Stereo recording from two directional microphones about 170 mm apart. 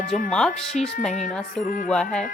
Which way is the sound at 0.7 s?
50° left (ahead or behind).